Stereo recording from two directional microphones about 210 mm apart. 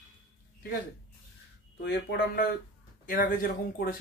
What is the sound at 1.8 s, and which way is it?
Speech, 55° left (ahead or behind).